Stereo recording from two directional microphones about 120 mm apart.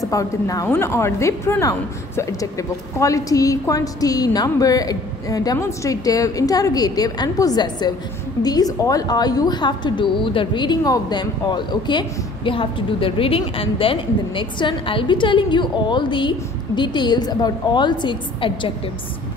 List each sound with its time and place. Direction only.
0.0 s a woman's voice: 30° left (ahead or behind)